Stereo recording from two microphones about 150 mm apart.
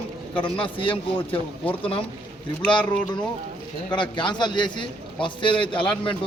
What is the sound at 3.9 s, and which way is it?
A man's voice, 30° left (ahead or behind).